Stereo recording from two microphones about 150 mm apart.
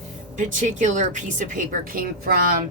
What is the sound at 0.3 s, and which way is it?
A woman's voice, 55° right (ahead or behind).